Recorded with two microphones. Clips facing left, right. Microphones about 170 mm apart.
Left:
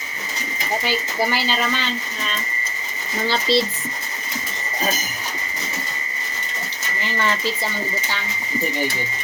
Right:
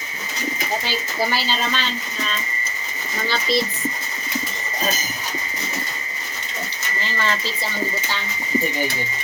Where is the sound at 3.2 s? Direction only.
25° left (ahead or behind).